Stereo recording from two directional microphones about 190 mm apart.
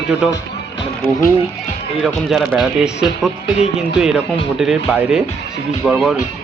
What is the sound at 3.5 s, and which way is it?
Speech, 35° left (ahead or behind).